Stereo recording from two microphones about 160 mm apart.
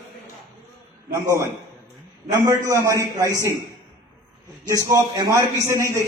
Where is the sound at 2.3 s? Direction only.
20° right (ahead or behind).